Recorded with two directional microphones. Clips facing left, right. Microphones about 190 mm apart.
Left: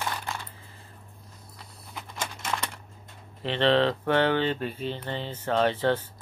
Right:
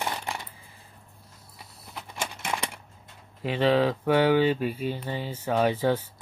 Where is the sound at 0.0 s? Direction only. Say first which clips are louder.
Right 1 dB; 15° right (ahead or behind).